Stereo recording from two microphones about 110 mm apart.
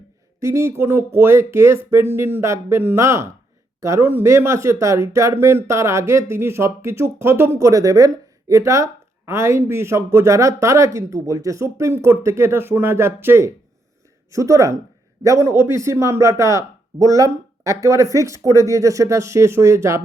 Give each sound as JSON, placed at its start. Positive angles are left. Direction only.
{"t": 0.3, "sound": "speech", "side_deg": -25}